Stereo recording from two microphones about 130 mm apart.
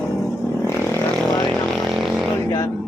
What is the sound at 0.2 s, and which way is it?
Vehicle, 20° left (ahead or behind).